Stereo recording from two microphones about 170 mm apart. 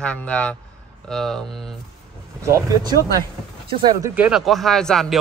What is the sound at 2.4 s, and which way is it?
Speech, 20° right (ahead or behind).